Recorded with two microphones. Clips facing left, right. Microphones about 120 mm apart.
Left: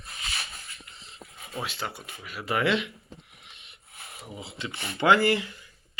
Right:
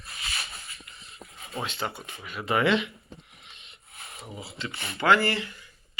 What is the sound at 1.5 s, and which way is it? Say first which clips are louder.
Speech: right 2 dB; centre (ahead or behind).